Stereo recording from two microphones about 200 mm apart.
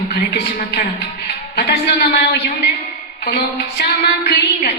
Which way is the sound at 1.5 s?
50° left (ahead or behind).